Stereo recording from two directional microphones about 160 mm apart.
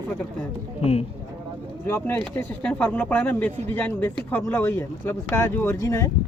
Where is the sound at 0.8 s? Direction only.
40° left (ahead or behind).